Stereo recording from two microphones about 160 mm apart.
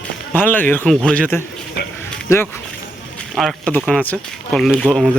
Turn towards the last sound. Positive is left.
turn(degrees=0)  # may be behind; listen again after turning